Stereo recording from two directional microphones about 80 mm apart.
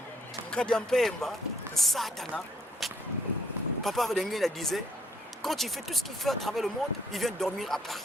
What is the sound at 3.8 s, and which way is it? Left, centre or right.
Speech, centre.